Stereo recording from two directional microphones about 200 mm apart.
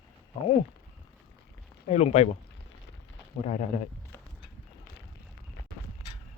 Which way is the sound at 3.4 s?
35° left (ahead or behind).